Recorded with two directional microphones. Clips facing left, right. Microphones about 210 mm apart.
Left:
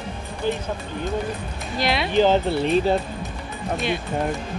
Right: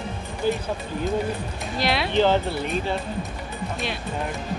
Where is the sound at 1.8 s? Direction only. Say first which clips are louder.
Left 1 dB; centre (ahead or behind).